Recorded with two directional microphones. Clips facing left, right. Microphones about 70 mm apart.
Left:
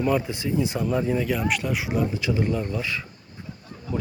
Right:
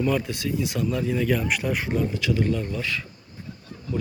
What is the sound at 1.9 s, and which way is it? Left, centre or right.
Speech, centre.